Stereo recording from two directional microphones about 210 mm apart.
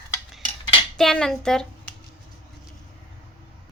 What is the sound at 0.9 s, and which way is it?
A woman's voice, centre (ahead or behind).